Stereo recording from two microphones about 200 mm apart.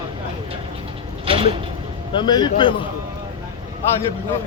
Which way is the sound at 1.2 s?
25° right (ahead or behind).